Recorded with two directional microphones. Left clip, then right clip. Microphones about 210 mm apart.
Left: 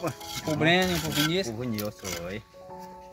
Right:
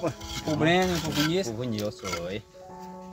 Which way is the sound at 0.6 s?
10° left (ahead or behind).